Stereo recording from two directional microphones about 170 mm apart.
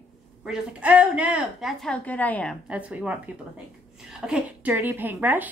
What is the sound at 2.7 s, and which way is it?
Speech, 5° right (ahead or behind).